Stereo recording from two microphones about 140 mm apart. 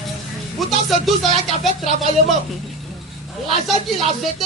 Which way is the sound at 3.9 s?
Centre (ahead or behind).